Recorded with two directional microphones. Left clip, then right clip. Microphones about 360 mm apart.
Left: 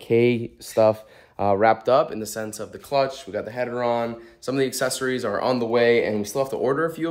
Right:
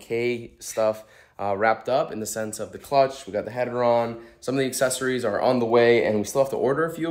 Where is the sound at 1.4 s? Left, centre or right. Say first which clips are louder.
Left 4 dB; centre.